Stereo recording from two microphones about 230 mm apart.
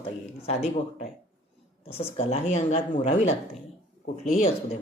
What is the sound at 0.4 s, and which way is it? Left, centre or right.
Speech, left.